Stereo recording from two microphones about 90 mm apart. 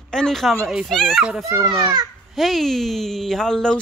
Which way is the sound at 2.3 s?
Centre (ahead or behind).